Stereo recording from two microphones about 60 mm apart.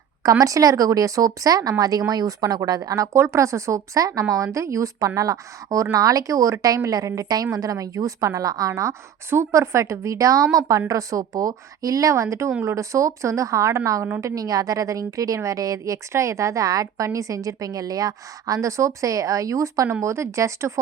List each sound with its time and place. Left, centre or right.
0.2 s speech: right
3.2 s a woman's voice: right
4.5 s a woman's voice: right
6.7 s a woman's voice: right
14.2 s a woman's voice: right
15.8 s a woman's voice: right
17.1 s a woman's voice: right